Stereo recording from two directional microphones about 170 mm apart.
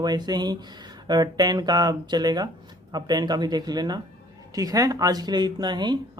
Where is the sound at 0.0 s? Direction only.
25° right (ahead or behind).